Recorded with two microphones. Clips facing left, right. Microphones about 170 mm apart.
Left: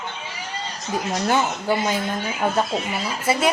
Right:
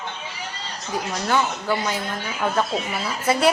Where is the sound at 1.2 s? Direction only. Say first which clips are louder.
Left 1 dB; 25° left (ahead or behind).